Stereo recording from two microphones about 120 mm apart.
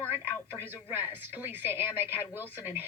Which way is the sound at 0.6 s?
15° right (ahead or behind).